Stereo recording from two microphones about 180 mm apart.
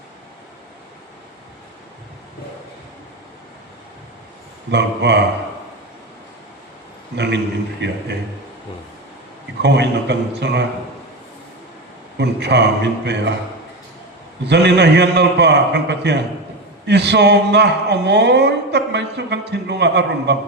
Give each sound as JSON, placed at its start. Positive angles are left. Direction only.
{"t": 4.7, "sound": "a man's voice", "side_deg": -70}
{"t": 7.2, "sound": "a man's voice", "side_deg": -70}
{"t": 9.6, "sound": "a man's voice", "side_deg": -70}
{"t": 12.1, "sound": "a man's voice", "side_deg": -70}
{"t": 14.4, "sound": "a man's voice", "side_deg": -70}